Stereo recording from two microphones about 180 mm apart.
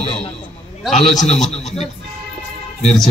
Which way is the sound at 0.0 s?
35° left (ahead or behind).